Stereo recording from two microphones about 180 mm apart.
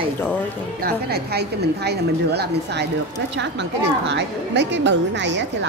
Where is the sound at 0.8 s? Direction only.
60° right (ahead or behind).